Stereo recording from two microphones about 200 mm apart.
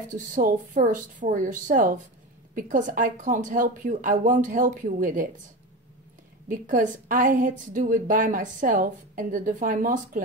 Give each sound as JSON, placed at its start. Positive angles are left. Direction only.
{"t": 0.1, "sound": "a woman's voice", "side_deg": -40}
{"t": 6.5, "sound": "a woman's voice", "side_deg": -40}